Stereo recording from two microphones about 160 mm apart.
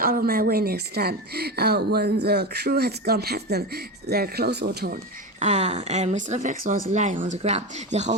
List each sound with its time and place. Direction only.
0.0 s a woman's voice: 70° right (ahead or behind)
5.4 s speech: 45° right (ahead or behind)